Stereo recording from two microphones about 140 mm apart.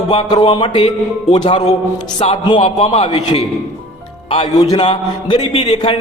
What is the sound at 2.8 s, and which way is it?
Speech, 45° left (ahead or behind).